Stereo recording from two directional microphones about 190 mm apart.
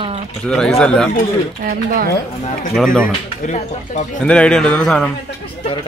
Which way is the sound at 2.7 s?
Centre (ahead or behind).